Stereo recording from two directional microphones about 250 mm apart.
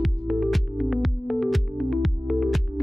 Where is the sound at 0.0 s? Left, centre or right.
Centre.